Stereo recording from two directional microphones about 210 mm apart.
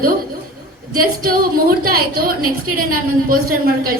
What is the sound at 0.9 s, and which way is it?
A woman's voice, 45° right (ahead or behind).